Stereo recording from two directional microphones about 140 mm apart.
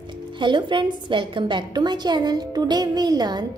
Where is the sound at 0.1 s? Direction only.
35° right (ahead or behind).